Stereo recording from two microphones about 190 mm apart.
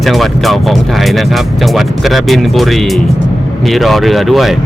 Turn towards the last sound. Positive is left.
turn(degrees=0)  # may be behind; listen again after turning